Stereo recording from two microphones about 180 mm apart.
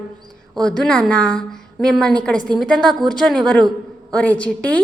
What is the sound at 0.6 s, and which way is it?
A woman's voice, 5° left (ahead or behind).